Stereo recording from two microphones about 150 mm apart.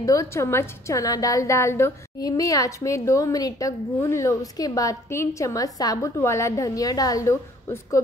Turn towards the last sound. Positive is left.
turn(degrees=20)  # may be behind; listen again after turning